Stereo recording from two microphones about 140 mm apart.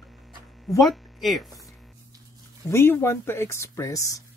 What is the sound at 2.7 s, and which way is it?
Speech, 20° left (ahead or behind).